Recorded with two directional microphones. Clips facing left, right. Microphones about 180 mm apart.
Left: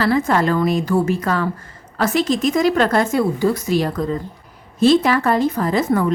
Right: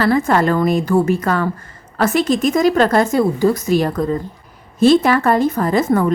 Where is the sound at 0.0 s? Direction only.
50° right (ahead or behind).